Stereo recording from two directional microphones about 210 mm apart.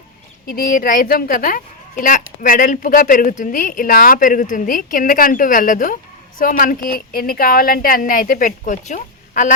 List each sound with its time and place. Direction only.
0.4 s a woman's voice: 45° left (ahead or behind)